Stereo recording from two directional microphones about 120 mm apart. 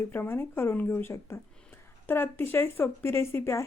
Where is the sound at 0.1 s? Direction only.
20° left (ahead or behind).